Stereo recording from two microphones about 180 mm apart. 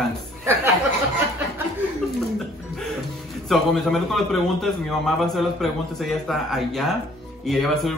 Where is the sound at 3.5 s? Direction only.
Centre (ahead or behind).